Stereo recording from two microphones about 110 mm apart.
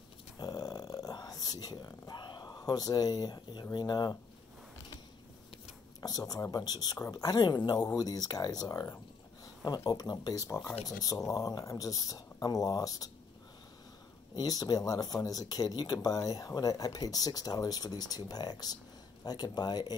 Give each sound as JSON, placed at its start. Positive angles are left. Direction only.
{"t": 0.4, "sound": "a sound", "side_deg": 35}
{"t": 3.7, "sound": "speech", "side_deg": 40}
{"t": 5.9, "sound": "speech", "side_deg": 35}
{"t": 14.3, "sound": "speech", "side_deg": 35}